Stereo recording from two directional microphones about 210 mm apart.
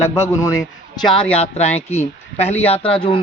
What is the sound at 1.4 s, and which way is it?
A man's voice, 30° left (ahead or behind).